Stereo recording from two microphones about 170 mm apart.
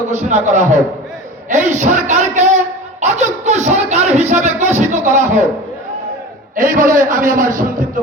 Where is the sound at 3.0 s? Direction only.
40° right (ahead or behind).